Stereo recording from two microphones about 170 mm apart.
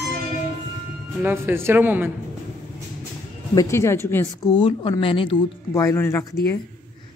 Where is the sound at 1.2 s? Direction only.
15° right (ahead or behind).